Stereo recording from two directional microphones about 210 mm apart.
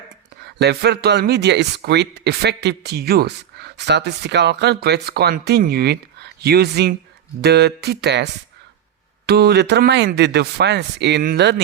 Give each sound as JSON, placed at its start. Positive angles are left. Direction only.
{"t": 0.4, "sound": "speech", "side_deg": -50}